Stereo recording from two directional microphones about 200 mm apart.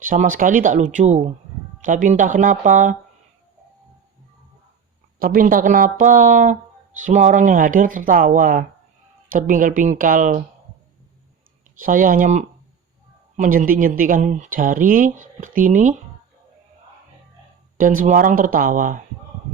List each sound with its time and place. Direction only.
0.0 s speech: 40° right (ahead or behind)
5.2 s speech: 45° right (ahead or behind)
11.8 s speech: 40° right (ahead or behind)
17.7 s speech: 40° right (ahead or behind)